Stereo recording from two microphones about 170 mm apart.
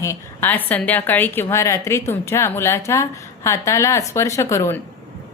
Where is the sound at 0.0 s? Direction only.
15° left (ahead or behind).